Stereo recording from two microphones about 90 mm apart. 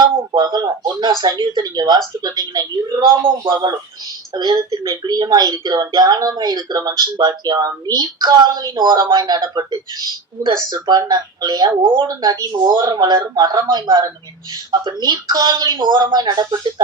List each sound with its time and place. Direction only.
0.0 s speech: 55° right (ahead or behind)
3.2 s speech: 60° right (ahead or behind)
12.0 s speech: 50° right (ahead or behind)